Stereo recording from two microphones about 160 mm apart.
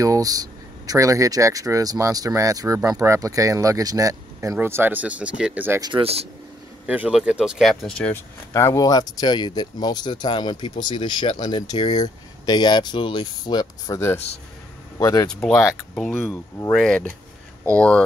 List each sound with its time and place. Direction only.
0.0 s speech: 20° right (ahead or behind)
5.8 s speech: 30° right (ahead or behind)
6.9 s speech: 5° right (ahead or behind)
8.1 s speech: 15° left (ahead or behind)
15.2 s speech: 5° left (ahead or behind)
16.1 s speech: 15° left (ahead or behind)
16.7 s speech: 5° left (ahead or behind)